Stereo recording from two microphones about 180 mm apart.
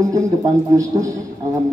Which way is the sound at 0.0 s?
20° right (ahead or behind).